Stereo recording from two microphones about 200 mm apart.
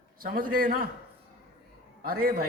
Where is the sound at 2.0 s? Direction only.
50° right (ahead or behind).